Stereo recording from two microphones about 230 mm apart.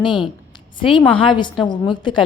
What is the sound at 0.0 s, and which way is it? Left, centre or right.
A woman's voice, left.